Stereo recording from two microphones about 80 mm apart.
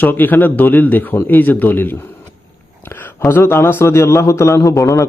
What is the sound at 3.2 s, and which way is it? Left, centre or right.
A man's voice, left.